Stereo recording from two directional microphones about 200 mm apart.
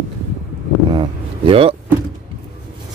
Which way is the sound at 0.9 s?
25° right (ahead or behind).